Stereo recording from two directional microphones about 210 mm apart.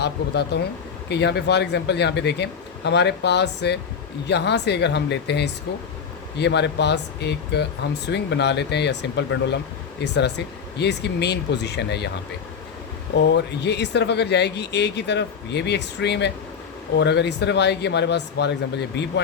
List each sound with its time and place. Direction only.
0.0 s speech: 55° left (ahead or behind)
13.3 s speech: 55° left (ahead or behind)